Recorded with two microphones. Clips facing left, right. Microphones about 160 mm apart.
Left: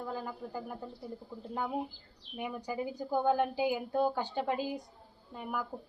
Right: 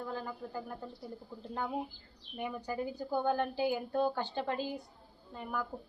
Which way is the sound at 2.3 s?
10° left (ahead or behind).